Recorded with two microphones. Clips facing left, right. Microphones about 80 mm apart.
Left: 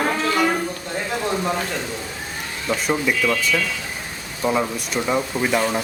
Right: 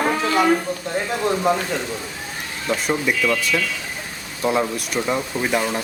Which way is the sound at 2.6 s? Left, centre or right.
Centre.